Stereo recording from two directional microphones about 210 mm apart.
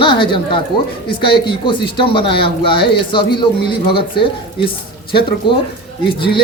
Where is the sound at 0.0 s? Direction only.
25° left (ahead or behind).